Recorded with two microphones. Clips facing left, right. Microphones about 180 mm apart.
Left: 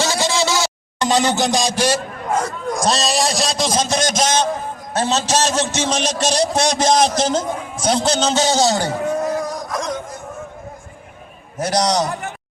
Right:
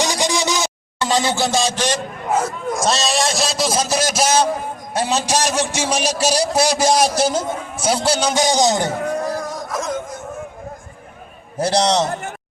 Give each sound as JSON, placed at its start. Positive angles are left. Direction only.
{"t": 0.0, "sound": "a sound", "side_deg": -15}
{"t": 0.9, "sound": "speech", "side_deg": 15}
{"t": 2.2, "sound": "a sound", "side_deg": -5}
{"t": 4.9, "sound": "a man's voice", "side_deg": -10}
{"t": 9.4, "sound": "music", "side_deg": 0}
{"t": 11.5, "sound": "a man's voice", "side_deg": -30}